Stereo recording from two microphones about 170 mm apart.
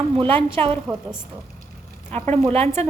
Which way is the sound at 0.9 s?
20° right (ahead or behind).